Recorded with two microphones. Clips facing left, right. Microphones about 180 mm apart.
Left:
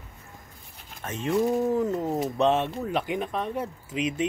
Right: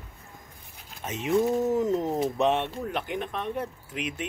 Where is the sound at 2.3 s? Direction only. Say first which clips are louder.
Left 2 dB; centre (ahead or behind).